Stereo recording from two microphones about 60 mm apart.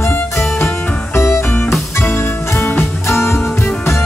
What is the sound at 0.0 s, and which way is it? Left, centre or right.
Music, left.